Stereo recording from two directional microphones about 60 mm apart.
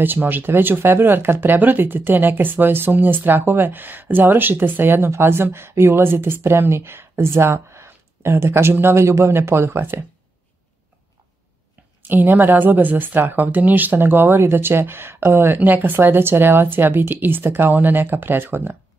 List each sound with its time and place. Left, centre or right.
0.0 s speech: right
12.0 s speech: right